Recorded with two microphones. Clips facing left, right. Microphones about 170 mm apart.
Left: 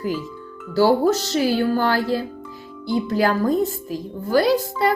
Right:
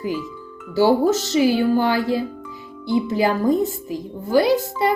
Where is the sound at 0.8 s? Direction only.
15° right (ahead or behind).